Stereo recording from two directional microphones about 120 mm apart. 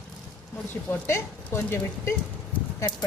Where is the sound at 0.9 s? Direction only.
20° left (ahead or behind).